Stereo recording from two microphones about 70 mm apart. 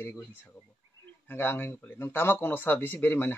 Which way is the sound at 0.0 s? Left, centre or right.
Left.